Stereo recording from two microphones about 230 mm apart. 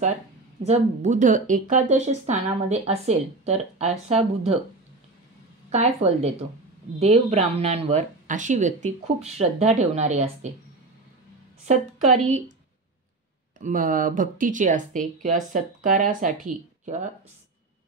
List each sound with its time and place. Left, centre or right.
0.7 s speech: right
5.7 s speech: right
11.6 s speech: right
13.6 s speech: right